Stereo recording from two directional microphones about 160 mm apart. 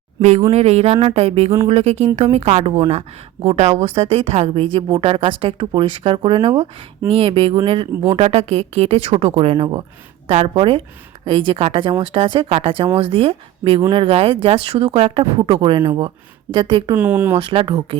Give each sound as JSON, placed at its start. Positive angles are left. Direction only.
{"t": 0.2, "sound": "a woman's voice", "side_deg": -45}
{"t": 16.9, "sound": "speech", "side_deg": -10}
{"t": 17.3, "sound": "a woman's voice", "side_deg": -35}